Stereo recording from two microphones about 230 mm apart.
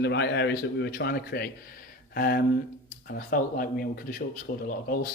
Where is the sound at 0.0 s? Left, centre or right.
Left.